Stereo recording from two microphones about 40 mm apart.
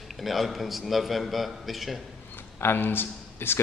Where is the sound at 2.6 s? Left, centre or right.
Left.